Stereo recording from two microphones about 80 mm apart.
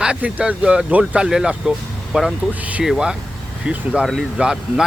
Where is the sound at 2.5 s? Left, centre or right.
Centre.